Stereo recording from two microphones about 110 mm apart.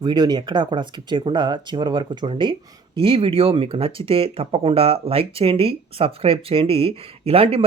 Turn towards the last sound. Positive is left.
turn(degrees=-60)  # may be behind; listen again after turning